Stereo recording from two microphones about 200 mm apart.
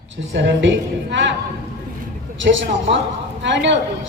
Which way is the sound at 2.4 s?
70° right (ahead or behind).